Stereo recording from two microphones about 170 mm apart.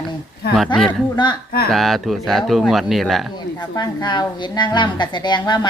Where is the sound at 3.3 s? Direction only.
25° left (ahead or behind).